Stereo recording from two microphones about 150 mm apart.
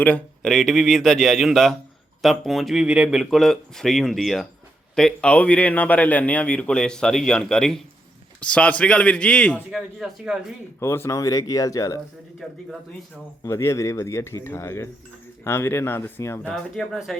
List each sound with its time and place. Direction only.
0.0 s a man's voice: 5° left (ahead or behind)
9.7 s speech: 5° right (ahead or behind)
10.8 s speech: 15° left (ahead or behind)
13.4 s a man's voice: 20° left (ahead or behind)
16.5 s speech: centre (ahead or behind)